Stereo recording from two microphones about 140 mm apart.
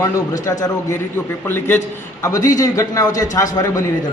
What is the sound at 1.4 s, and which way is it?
Mantra, 15° left (ahead or behind).